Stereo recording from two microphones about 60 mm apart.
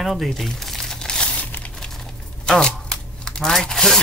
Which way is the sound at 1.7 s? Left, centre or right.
Centre.